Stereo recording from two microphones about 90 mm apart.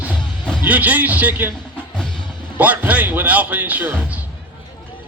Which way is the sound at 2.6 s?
20° right (ahead or behind).